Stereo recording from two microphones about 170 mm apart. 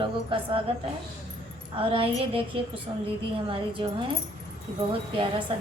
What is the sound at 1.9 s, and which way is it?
Speech, 30° right (ahead or behind).